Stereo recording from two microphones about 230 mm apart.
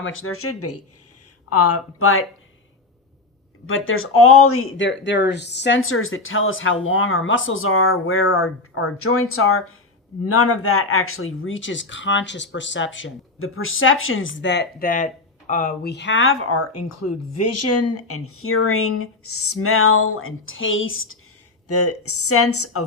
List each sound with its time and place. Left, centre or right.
0.0 s speech: left
1.5 s speech: left
3.7 s speech: left
21.7 s speech: left